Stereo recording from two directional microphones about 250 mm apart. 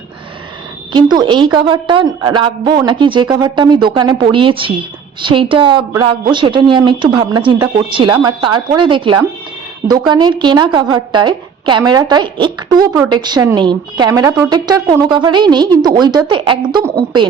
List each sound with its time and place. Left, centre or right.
0.9 s a woman's voice: centre